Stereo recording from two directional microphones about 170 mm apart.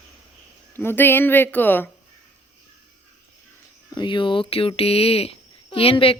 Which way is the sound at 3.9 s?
30° left (ahead or behind).